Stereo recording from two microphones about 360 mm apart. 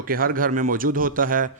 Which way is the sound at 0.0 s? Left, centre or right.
Right.